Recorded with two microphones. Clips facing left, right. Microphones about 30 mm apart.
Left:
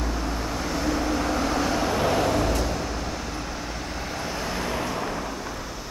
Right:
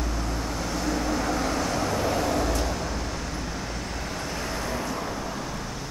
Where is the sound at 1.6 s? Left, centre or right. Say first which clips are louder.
Left 3 dB; left.